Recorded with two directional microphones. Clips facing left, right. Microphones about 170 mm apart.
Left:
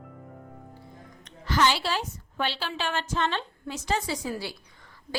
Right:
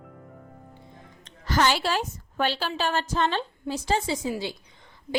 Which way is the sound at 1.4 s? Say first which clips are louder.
Right 1 dB; 45° right (ahead or behind).